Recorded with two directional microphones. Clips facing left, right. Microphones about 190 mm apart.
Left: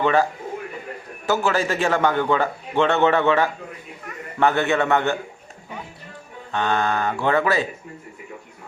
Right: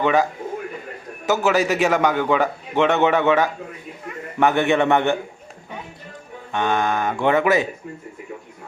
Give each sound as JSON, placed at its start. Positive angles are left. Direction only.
{"t": 0.0, "sound": "a man's voice", "side_deg": -15}
{"t": 1.5, "sound": "a man's voice", "side_deg": -15}
{"t": 6.5, "sound": "a man's voice", "side_deg": -15}